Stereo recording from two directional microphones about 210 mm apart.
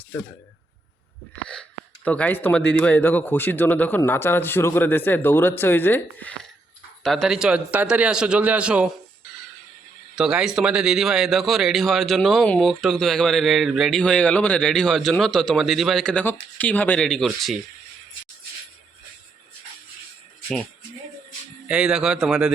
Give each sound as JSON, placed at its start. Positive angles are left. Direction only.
{"t": 2.0, "sound": "speech", "side_deg": 5}
{"t": 10.2, "sound": "speech", "side_deg": -5}
{"t": 21.7, "sound": "speech", "side_deg": -5}